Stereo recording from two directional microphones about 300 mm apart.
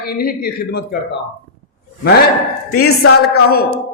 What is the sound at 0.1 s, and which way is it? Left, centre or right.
Speech, left.